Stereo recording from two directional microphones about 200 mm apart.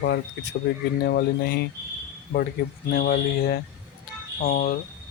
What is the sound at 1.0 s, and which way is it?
Speech, 50° left (ahead or behind).